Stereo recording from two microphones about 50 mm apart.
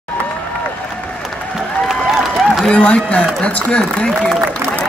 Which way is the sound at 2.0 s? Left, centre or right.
Centre.